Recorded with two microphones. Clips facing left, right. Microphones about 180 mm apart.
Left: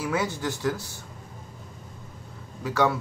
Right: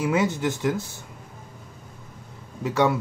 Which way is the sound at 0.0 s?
20° right (ahead or behind).